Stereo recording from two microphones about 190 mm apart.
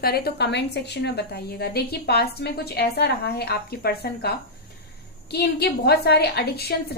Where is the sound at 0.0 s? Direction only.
55° left (ahead or behind).